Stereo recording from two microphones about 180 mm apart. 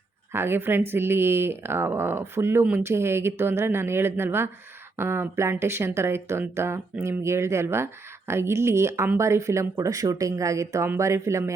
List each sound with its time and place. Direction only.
0.3 s speech: 10° right (ahead or behind)